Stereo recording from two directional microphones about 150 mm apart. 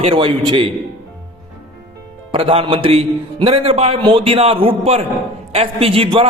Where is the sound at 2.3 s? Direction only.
40° right (ahead or behind).